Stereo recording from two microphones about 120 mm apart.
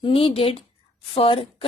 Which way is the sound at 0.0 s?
45° left (ahead or behind).